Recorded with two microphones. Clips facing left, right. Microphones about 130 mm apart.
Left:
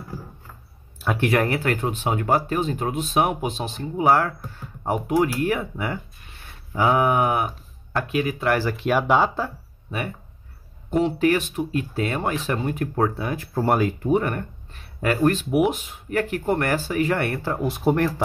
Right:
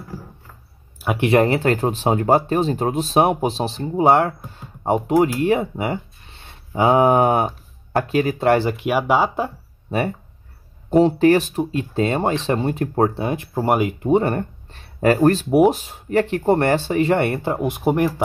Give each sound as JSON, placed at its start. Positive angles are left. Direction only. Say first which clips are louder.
{"t": 1.0, "sound": "speech", "louder": "right 5 dB", "side_deg": -15}
{"t": 8.8, "sound": "speech", "louder": "right 1 dB", "side_deg": -10}
{"t": 9.8, "sound": "speech", "louder": "right 8 dB", "side_deg": -35}